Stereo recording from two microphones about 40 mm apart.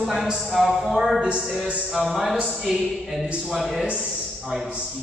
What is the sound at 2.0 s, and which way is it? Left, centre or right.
A man's voice, centre.